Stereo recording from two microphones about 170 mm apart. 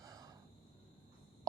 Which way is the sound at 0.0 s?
20° right (ahead or behind).